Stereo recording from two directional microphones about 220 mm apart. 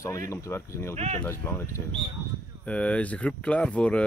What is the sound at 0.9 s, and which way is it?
Speech, 30° right (ahead or behind).